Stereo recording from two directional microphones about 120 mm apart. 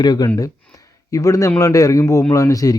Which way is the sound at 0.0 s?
35° left (ahead or behind).